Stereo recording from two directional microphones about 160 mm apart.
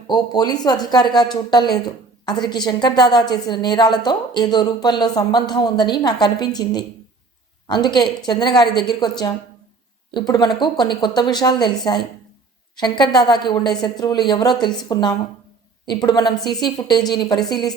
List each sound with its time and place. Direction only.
0.1 s a woman's voice: 25° left (ahead or behind)